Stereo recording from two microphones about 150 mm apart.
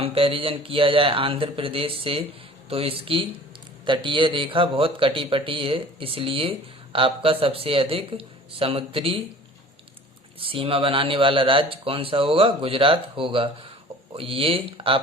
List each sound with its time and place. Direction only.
0.0 s speech: 40° right (ahead or behind)
10.4 s speech: 35° right (ahead or behind)